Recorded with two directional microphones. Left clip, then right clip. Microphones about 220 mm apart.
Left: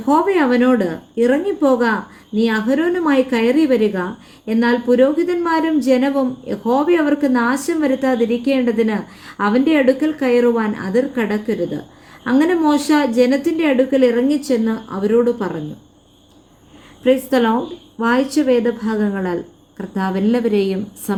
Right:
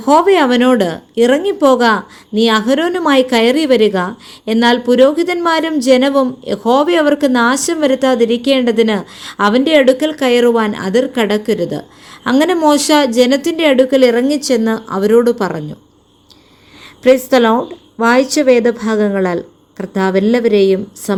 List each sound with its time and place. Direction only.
0.0 s speech: 25° right (ahead or behind)
17.0 s speech: 25° right (ahead or behind)